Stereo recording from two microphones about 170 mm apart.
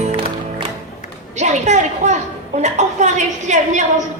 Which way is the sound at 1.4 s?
45° right (ahead or behind).